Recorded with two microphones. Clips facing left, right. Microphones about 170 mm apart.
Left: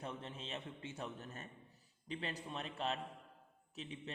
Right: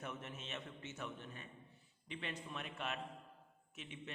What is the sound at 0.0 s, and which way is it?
A man's voice, 30° left (ahead or behind).